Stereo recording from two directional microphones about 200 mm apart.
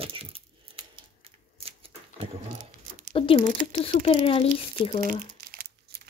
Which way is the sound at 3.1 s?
25° left (ahead or behind).